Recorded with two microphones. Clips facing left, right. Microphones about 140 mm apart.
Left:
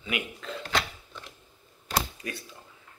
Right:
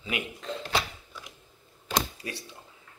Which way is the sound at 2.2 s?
30° right (ahead or behind).